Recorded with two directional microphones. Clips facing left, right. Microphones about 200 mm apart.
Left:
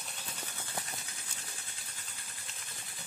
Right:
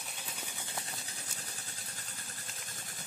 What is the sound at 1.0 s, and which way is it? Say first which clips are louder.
Vehicle: right 2 dB; 35° right (ahead or behind).